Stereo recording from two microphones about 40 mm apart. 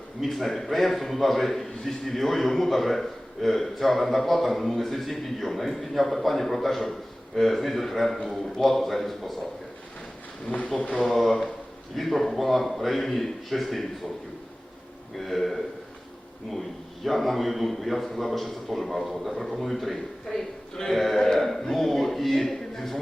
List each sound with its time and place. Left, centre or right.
0.2 s a man's voice: centre
10.4 s speech: left
10.9 s a man's voice: centre
15.2 s a man's voice: centre